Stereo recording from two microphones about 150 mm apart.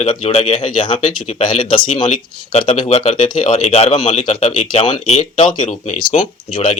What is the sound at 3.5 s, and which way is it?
Speech, 45° left (ahead or behind).